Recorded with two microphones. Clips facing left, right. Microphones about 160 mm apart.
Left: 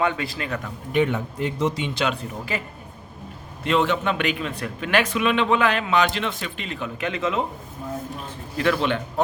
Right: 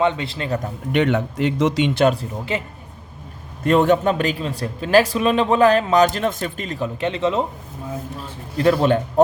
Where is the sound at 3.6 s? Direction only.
45° right (ahead or behind); by 7.4 s 30° right (ahead or behind).